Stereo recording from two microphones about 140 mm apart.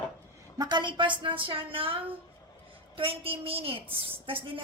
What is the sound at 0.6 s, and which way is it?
A woman's voice, 30° right (ahead or behind).